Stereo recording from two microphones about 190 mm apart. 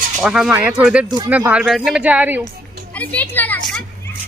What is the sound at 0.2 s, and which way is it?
Speech, 5° right (ahead or behind).